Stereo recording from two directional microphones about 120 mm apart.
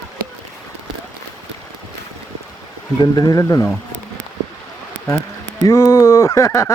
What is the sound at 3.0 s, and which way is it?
Speech, 30° left (ahead or behind).